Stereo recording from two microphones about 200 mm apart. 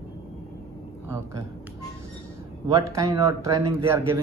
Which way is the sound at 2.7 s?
15° right (ahead or behind).